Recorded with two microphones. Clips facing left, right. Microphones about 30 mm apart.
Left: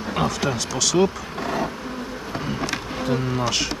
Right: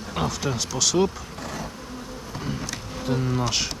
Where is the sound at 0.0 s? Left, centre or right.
Left.